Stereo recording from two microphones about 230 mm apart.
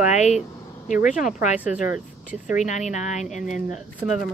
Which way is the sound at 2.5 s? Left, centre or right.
Left.